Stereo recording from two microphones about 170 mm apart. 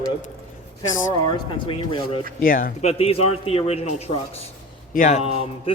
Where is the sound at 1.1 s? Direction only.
30° left (ahead or behind).